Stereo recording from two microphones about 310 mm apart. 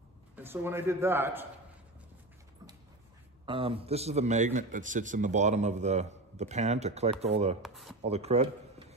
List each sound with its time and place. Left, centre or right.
0.4 s a man's voice: centre
3.4 s a man's voice: centre
7.6 s speech: centre
8.0 s speech: centre